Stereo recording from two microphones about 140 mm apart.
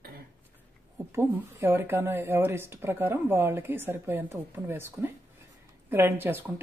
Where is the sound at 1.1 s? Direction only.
15° right (ahead or behind).